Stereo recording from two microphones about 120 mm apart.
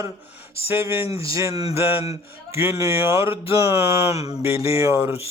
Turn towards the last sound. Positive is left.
turn(degrees=-20)  # may be behind; listen again after turning